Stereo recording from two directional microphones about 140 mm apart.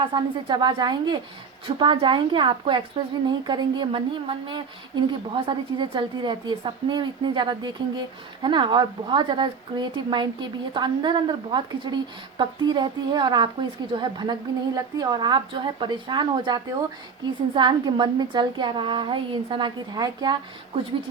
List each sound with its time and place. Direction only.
0.0 s a woman's voice: 35° right (ahead or behind)